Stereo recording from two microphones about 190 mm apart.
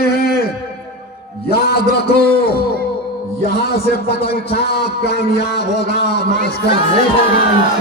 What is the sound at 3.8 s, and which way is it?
Speech, 30° left (ahead or behind).